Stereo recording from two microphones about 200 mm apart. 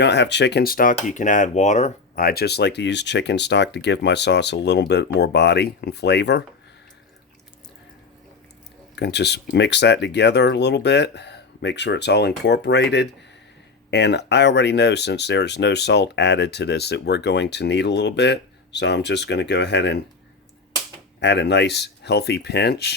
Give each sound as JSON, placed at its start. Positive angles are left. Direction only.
{"t": 0.0, "sound": "speech", "side_deg": 60}
{"t": 9.0, "sound": "speech", "side_deg": 55}
{"t": 21.2, "sound": "speech", "side_deg": 60}